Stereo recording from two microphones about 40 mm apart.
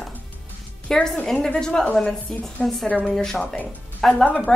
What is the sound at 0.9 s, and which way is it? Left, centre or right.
A woman's voice, centre.